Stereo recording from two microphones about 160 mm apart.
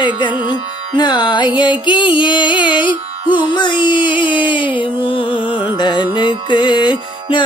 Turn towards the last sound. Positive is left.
turn(degrees=30)  # may be behind; listen again after turning